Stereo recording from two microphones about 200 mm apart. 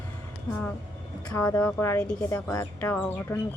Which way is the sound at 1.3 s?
15° left (ahead or behind).